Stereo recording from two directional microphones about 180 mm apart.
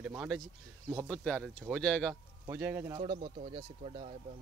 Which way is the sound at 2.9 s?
25° right (ahead or behind).